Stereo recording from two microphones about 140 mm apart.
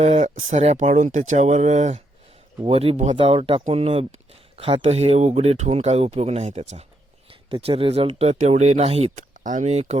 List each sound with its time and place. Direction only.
0.0 s speech: 60° right (ahead or behind)
2.6 s speech: 45° right (ahead or behind)
9.1 s speech: 65° right (ahead or behind)